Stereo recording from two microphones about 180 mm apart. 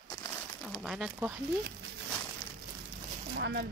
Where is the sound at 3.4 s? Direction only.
70° right (ahead or behind).